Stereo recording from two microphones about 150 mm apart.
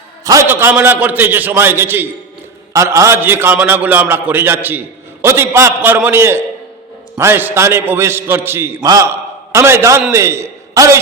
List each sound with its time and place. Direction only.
0.3 s a man's voice: 15° right (ahead or behind)